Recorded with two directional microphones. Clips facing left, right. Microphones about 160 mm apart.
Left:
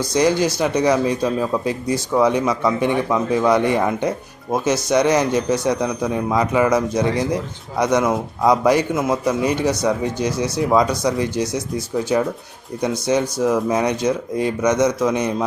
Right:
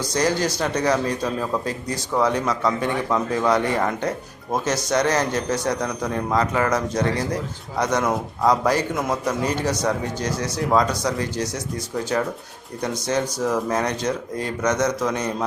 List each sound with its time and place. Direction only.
0.1 s a man's voice: 10° left (ahead or behind)